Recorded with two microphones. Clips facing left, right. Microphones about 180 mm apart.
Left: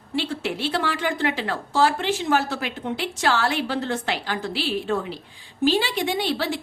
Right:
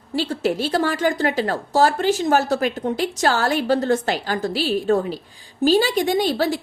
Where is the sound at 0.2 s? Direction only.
40° right (ahead or behind).